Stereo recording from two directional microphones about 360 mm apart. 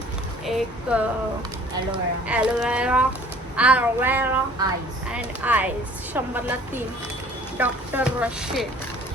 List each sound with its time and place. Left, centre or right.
0.4 s a child's voice: centre
7.6 s a child's voice: centre